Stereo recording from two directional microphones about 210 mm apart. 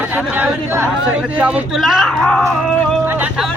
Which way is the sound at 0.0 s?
5° right (ahead or behind).